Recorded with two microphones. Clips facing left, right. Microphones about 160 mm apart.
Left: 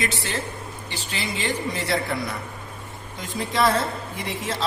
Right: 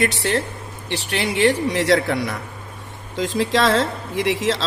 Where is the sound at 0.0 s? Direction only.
70° right (ahead or behind).